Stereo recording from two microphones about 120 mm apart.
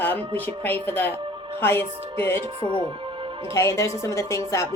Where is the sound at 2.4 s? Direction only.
45° right (ahead or behind).